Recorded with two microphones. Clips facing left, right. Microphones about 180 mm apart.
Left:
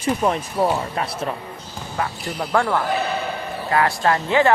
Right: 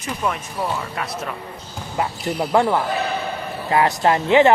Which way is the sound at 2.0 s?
20° right (ahead or behind).